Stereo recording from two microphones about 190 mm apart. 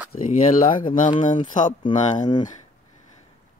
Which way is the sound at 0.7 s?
25° left (ahead or behind).